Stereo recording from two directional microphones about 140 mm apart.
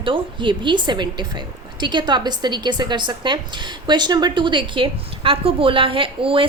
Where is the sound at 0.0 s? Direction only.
35° right (ahead or behind).